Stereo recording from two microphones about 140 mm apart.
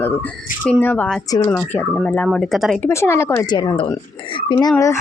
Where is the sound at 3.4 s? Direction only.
30° left (ahead or behind).